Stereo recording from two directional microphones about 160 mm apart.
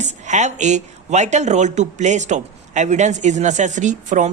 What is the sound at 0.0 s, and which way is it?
Speech, 50° right (ahead or behind).